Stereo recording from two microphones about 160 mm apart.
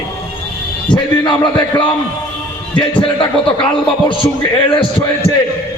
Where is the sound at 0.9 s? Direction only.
30° left (ahead or behind).